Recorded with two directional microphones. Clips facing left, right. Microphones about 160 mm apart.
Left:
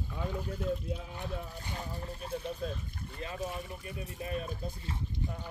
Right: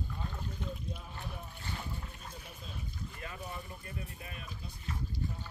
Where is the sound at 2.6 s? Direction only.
60° left (ahead or behind).